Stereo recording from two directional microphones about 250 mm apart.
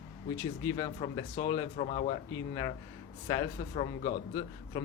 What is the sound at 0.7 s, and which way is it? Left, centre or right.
Speech, centre.